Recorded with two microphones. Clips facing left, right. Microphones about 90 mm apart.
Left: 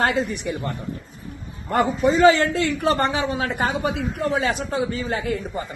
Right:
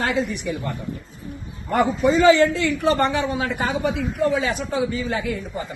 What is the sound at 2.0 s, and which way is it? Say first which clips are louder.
A man's voice: right 1 dB; 40° left (ahead or behind).